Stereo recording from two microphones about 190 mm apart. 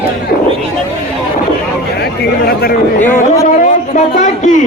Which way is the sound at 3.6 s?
40° left (ahead or behind).